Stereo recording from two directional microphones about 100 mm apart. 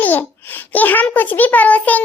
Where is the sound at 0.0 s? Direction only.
20° left (ahead or behind).